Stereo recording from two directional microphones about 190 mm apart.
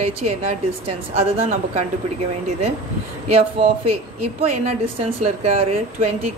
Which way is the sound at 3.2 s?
30° right (ahead or behind).